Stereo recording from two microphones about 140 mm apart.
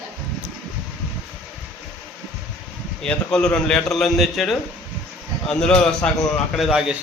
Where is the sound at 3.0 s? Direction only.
5° left (ahead or behind).